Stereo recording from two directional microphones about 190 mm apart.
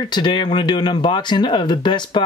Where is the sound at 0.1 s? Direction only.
25° left (ahead or behind).